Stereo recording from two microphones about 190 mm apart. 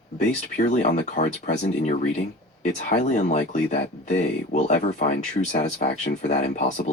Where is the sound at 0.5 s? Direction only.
40° left (ahead or behind).